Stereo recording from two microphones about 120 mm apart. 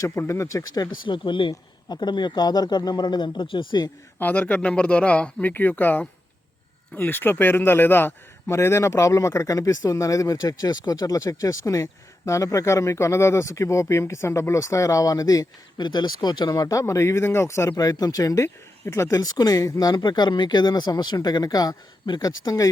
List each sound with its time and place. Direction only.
0.2 s speech: 25° left (ahead or behind)
4.2 s a man's voice: 15° left (ahead or behind); by 22.7 s 30° left (ahead or behind)